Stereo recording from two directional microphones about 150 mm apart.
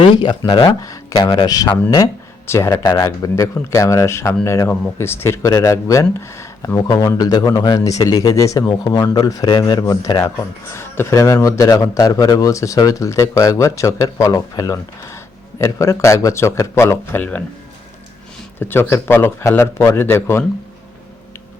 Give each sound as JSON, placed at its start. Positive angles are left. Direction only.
{"t": 0.0, "sound": "speech", "side_deg": 30}
{"t": 18.6, "sound": "a man's voice", "side_deg": 15}